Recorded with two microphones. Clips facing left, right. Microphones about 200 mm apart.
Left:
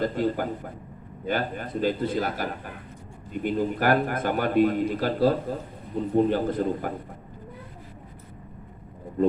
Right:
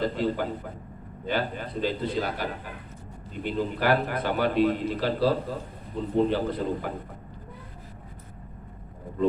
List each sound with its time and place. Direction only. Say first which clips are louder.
0.0 s a man's voice: left 1 dB; 45° left (ahead or behind)